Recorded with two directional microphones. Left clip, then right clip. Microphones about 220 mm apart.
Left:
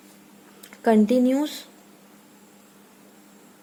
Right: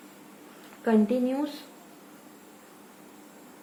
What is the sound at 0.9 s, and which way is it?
Speech, 30° left (ahead or behind).